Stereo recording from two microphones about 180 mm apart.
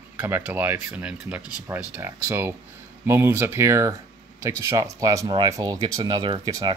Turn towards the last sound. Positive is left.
turn(degrees=-25)  # may be behind; listen again after turning